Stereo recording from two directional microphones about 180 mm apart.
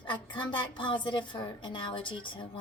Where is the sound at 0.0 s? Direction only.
25° left (ahead or behind).